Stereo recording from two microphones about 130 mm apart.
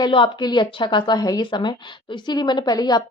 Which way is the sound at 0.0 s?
35° left (ahead or behind).